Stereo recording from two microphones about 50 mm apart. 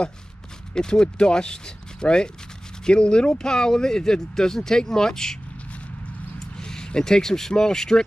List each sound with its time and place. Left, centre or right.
0.7 s speech: centre
6.5 s speech: centre